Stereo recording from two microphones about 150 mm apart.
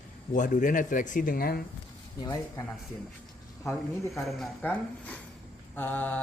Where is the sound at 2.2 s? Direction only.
25° left (ahead or behind).